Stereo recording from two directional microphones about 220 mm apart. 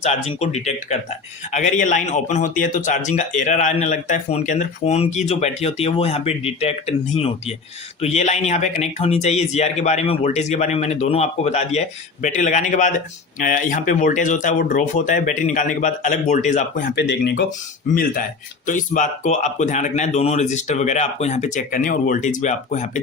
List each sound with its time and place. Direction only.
0.0 s speech: 30° left (ahead or behind)
17.0 s speech: 50° left (ahead or behind)
17.9 s speech: 40° left (ahead or behind)